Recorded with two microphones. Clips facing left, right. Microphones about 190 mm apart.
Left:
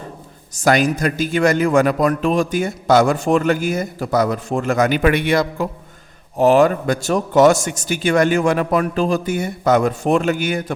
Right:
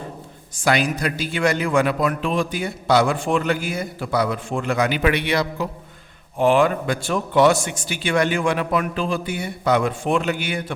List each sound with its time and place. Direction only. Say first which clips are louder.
0.5 s speech: left 4 dB; 45° left (ahead or behind)